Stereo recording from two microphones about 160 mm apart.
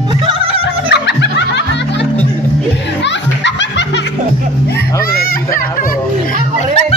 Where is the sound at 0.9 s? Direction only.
90° left.